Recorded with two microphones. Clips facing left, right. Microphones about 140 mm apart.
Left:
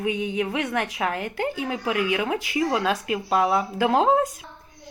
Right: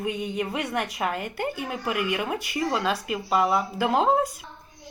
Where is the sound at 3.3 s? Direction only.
Centre (ahead or behind).